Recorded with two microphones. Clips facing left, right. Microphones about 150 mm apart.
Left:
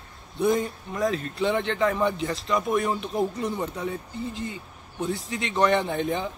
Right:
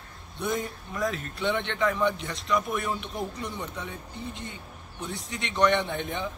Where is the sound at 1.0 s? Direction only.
35° left (ahead or behind).